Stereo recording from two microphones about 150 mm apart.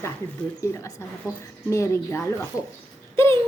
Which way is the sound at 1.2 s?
20° left (ahead or behind).